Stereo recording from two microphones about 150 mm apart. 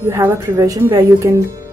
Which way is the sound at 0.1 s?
15° right (ahead or behind).